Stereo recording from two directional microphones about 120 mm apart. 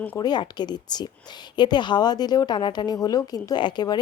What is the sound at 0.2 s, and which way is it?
A woman's voice, 35° left (ahead or behind).